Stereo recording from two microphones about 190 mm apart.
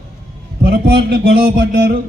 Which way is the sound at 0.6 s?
55° right (ahead or behind).